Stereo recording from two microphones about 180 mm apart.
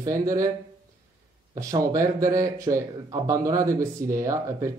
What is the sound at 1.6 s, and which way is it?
Speech, 20° right (ahead or behind).